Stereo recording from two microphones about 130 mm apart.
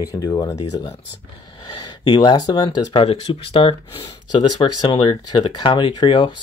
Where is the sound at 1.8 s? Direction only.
35° left (ahead or behind).